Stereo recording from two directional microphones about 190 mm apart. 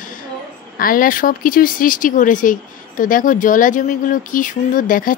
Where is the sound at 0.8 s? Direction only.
45° left (ahead or behind).